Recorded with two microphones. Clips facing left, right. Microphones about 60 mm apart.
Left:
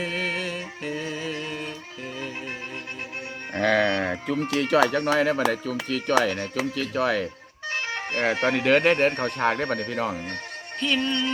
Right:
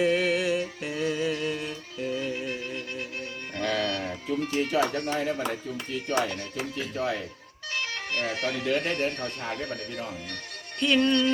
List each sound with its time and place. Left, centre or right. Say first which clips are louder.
0.0 s music: right 4 dB; centre
1.5 s music: even; left
3.6 s music: left 7 dB; left
4.0 s music: left 4 dB; left
4.4 s speech: left 5 dB; left
7.7 s music: left 3 dB; left
8.3 s speech: left 9 dB; left
8.5 s speech: left 9 dB; left
9.9 s speech: left 8 dB; left
11.0 s music: right 3 dB; left